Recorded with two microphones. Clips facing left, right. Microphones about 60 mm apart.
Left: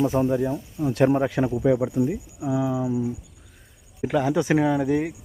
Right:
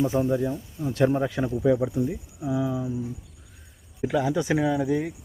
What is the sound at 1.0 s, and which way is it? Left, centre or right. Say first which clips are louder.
Speech: left 3 dB; left.